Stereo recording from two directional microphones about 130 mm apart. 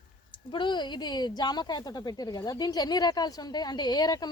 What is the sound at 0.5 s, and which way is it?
Speech, 35° left (ahead or behind).